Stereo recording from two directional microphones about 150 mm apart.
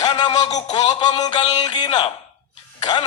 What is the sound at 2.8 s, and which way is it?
Speech, 30° left (ahead or behind).